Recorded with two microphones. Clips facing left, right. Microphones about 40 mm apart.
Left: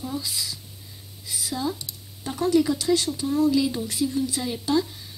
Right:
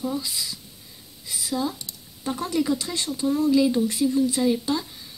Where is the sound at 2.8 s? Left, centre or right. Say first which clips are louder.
Left 5 dB; right.